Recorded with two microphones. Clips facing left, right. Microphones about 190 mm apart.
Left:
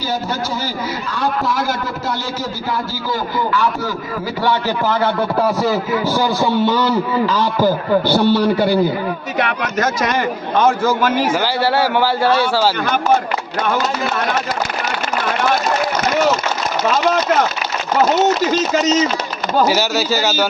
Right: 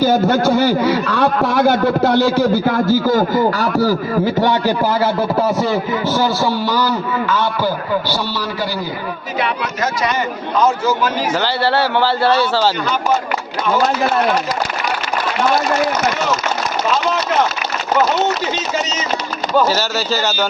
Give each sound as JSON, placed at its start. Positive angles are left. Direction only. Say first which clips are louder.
{"t": 0.0, "sound": "a man's voice", "louder": "right 9 dB", "side_deg": -55}
{"t": 4.4, "sound": "a man's voice", "louder": "right 3 dB", "side_deg": -15}
{"t": 6.1, "sound": "a man's voice", "louder": "left 1 dB", "side_deg": 15}
{"t": 8.3, "sound": "a man's voice", "louder": "left 8 dB", "side_deg": 55}
{"t": 11.6, "sound": "a man's voice", "louder": "even", "side_deg": 10}
{"t": 19.6, "sound": "a man's voice", "louder": "left 2 dB", "side_deg": 10}